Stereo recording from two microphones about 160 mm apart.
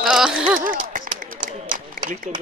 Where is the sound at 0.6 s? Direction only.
60° right (ahead or behind).